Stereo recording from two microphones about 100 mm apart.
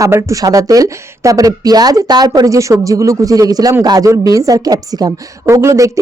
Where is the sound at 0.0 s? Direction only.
30° right (ahead or behind).